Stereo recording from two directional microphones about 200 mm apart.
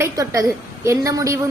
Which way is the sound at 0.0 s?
15° right (ahead or behind).